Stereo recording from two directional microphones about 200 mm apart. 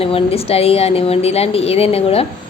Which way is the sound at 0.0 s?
30° left (ahead or behind).